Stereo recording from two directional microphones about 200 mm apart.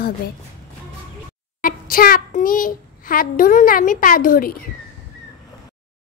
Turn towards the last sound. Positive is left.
turn(degrees=45)  # may be behind; listen again after turning